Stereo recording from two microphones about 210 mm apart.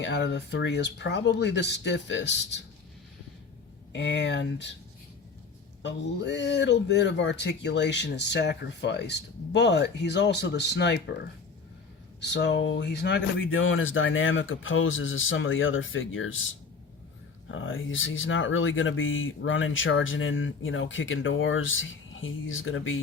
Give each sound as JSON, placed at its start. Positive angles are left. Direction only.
{"t": 0.0, "sound": "speech", "side_deg": 55}
{"t": 3.9, "sound": "speech", "side_deg": 55}
{"t": 5.8, "sound": "speech", "side_deg": 55}
{"t": 12.2, "sound": "speech", "side_deg": 55}